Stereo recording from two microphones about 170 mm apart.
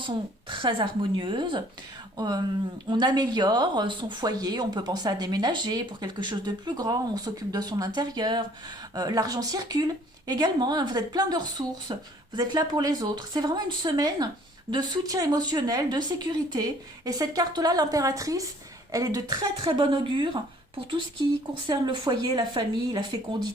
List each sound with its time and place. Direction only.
0.0 s speech: 30° right (ahead or behind)
21.7 s speech: 25° right (ahead or behind)